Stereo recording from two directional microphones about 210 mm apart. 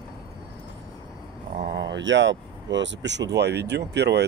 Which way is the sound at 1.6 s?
60° right (ahead or behind).